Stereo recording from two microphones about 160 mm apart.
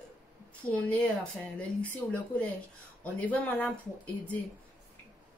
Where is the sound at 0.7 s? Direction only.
10° left (ahead or behind).